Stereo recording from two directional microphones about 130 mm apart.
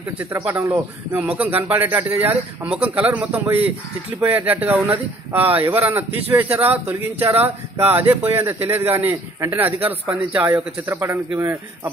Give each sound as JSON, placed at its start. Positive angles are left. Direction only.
{"t": 0.2, "sound": "speech", "side_deg": -10}